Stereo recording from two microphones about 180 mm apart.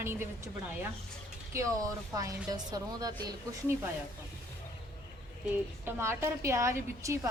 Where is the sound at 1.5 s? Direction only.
20° right (ahead or behind).